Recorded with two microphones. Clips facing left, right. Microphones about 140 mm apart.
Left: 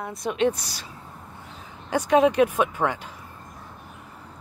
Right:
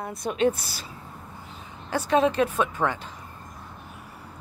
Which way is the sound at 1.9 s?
15° left (ahead or behind).